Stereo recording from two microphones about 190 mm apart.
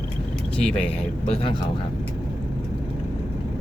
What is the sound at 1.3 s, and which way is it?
Speech, 30° left (ahead or behind).